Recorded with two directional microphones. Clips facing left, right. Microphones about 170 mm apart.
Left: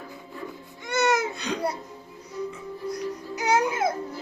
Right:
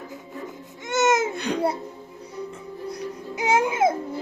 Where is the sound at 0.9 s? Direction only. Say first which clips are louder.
Right 3 dB; 20° right (ahead or behind).